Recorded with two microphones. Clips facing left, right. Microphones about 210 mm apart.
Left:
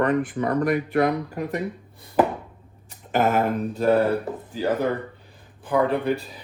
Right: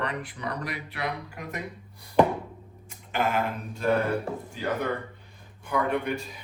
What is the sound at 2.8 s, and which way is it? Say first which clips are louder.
Speech: left 6 dB; 45° left (ahead or behind).